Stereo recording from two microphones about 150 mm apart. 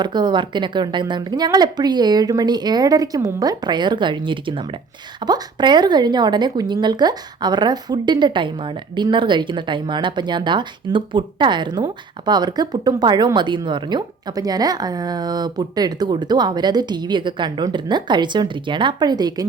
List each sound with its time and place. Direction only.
0.0 s speech: 30° right (ahead or behind)